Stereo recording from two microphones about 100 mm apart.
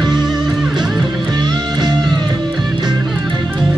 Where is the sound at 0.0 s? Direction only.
45° right (ahead or behind).